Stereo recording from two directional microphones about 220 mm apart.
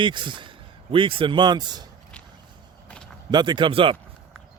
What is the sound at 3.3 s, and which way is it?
Speech, 20° right (ahead or behind).